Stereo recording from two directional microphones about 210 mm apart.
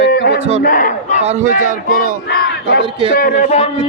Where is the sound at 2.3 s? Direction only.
50° left (ahead or behind).